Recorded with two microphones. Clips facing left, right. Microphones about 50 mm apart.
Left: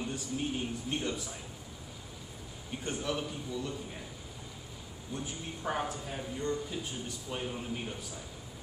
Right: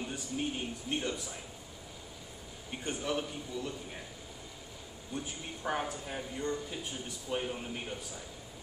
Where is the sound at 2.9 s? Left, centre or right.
Centre.